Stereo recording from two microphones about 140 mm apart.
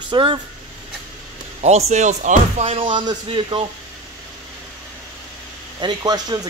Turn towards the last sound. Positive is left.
turn(degrees=-30)  # may be behind; listen again after turning